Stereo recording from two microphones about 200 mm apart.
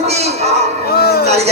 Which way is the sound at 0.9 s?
50° left (ahead or behind).